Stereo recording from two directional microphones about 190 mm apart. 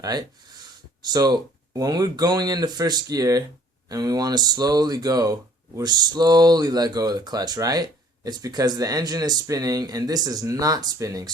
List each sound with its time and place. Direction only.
0.0 s speech: 20° right (ahead or behind)